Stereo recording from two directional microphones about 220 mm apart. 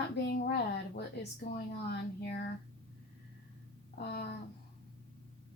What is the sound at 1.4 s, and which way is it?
Speech, 50° left (ahead or behind).